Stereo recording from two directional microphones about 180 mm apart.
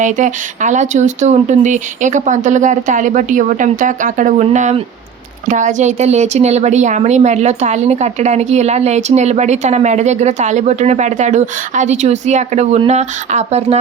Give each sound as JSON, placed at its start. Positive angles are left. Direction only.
{"t": 0.0, "sound": "speech", "side_deg": -45}